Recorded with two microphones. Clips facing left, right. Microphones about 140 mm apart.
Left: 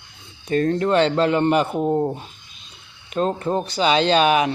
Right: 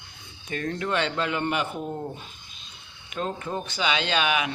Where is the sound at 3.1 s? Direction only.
35° left (ahead or behind).